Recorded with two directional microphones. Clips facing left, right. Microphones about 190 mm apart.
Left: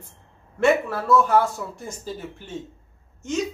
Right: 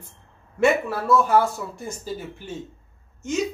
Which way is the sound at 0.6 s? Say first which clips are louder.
Even; 5° right (ahead or behind).